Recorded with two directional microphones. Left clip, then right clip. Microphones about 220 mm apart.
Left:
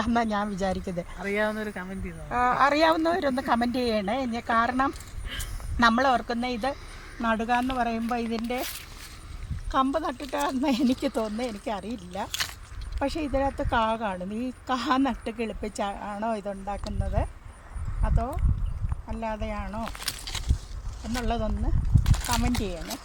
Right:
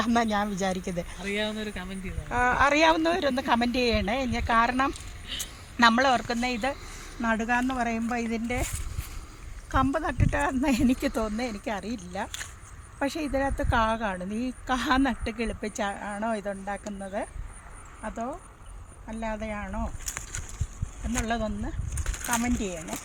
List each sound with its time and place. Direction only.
0.0 s speech: 20° right (ahead or behind)
1.2 s speech: 20° left (ahead or behind)
2.3 s speech: 10° right (ahead or behind)
9.7 s speech: centre (ahead or behind)
21.1 s speech: centre (ahead or behind)